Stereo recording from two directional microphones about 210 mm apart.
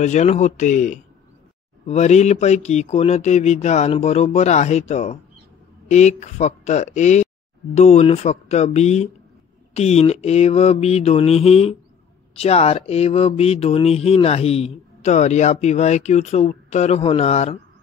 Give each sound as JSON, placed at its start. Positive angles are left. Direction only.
{"t": 0.0, "sound": "speech", "side_deg": 35}